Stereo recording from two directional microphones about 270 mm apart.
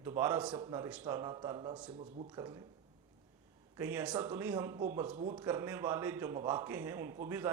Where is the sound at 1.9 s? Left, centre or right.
Right.